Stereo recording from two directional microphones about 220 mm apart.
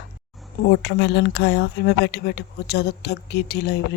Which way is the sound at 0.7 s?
50° left (ahead or behind).